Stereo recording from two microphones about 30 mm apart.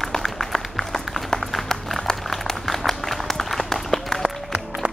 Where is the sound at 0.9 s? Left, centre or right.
Centre.